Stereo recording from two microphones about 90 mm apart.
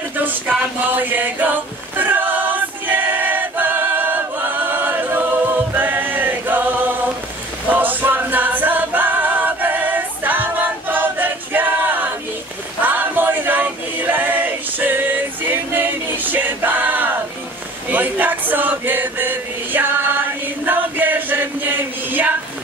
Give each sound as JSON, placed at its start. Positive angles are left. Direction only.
{"t": 0.1, "sound": "a sound", "side_deg": -20}
{"t": 0.9, "sound": "chant", "side_deg": -20}
{"t": 2.0, "sound": "choir", "side_deg": -20}
{"t": 7.7, "sound": "a capella", "side_deg": -20}
{"t": 12.8, "sound": "choir", "side_deg": -20}
{"t": 17.8, "sound": "chant", "side_deg": -20}